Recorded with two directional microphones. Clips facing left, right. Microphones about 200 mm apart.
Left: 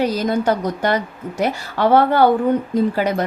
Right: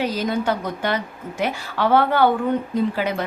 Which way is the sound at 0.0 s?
45° left (ahead or behind).